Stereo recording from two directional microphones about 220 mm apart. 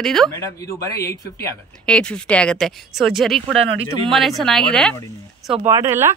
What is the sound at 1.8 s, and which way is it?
Speech, 5° left (ahead or behind).